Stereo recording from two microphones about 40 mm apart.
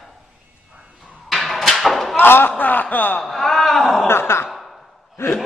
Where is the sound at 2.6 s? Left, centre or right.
Left.